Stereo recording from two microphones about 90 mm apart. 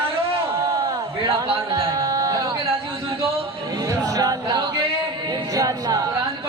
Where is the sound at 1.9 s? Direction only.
40° right (ahead or behind).